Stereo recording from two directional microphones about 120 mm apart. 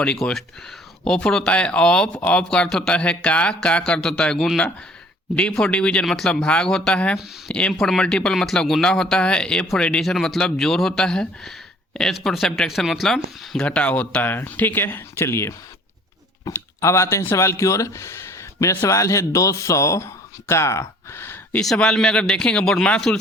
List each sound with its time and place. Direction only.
0.0 s speech: 10° left (ahead or behind)
21.6 s speech: 5° left (ahead or behind)